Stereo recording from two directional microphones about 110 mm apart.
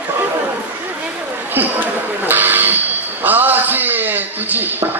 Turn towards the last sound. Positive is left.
turn(degrees=-15)  # may be behind; listen again after turning